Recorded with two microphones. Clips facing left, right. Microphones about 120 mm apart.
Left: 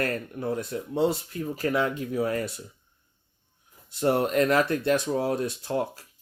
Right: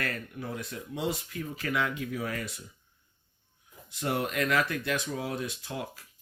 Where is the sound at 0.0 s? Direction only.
40° left (ahead or behind).